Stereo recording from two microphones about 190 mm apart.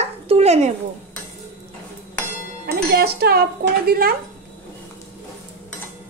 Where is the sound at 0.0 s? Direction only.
35° right (ahead or behind).